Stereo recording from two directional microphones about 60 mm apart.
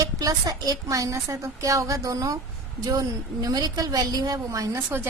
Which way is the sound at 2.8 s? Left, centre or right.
Right.